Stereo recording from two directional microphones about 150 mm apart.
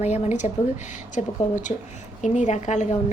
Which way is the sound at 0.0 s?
50° left (ahead or behind).